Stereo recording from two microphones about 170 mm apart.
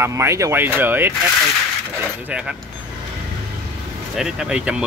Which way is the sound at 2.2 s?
5° right (ahead or behind).